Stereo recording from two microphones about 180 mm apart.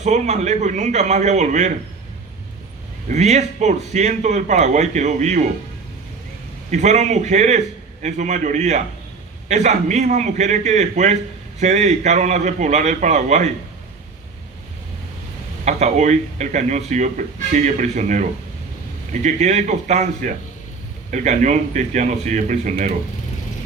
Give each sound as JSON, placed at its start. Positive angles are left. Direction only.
{"t": 0.0, "sound": "speech", "side_deg": -40}
{"t": 3.1, "sound": "speech", "side_deg": -40}
{"t": 6.7, "sound": "speech", "side_deg": -40}
{"t": 15.6, "sound": "a man's voice", "side_deg": -40}